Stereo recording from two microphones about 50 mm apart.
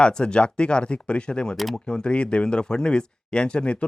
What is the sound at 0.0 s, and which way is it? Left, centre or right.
Speech, centre.